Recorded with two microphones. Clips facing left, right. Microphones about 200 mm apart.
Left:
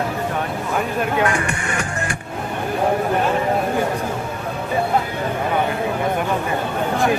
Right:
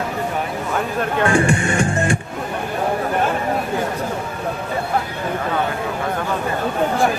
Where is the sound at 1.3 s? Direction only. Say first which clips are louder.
Right 6 dB; 30° right (ahead or behind).